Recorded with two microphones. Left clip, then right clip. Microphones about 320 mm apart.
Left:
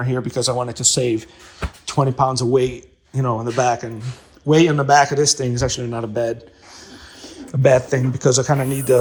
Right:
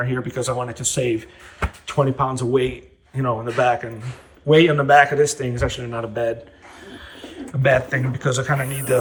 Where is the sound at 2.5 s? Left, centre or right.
Left.